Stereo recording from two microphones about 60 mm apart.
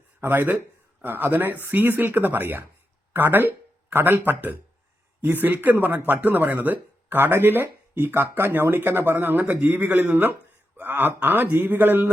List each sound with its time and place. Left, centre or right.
0.2 s speech: right
3.1 s a sound: right
4.3 s speech: right